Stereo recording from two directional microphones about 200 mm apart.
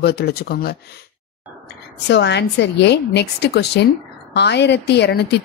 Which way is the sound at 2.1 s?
60° left (ahead or behind).